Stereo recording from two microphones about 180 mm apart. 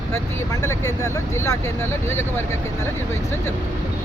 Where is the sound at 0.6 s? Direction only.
15° left (ahead or behind).